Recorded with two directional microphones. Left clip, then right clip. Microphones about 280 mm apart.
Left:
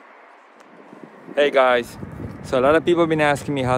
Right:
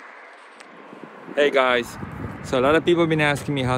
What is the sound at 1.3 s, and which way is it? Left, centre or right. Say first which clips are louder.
Speech: left 2 dB; centre.